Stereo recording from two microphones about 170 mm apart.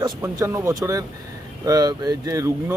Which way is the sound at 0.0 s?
20° right (ahead or behind).